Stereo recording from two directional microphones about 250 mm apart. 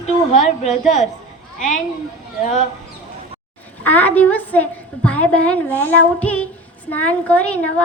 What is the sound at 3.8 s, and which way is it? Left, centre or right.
A woman's voice, centre.